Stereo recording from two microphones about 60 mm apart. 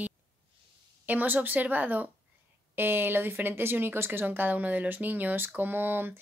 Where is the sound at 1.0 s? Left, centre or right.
Right.